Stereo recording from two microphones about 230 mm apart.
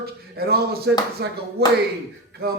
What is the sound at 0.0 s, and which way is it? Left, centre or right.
A man's voice, right.